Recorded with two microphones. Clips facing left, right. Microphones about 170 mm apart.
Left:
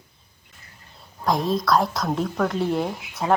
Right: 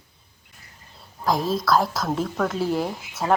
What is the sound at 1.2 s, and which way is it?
A woman's voice, centre (ahead or behind).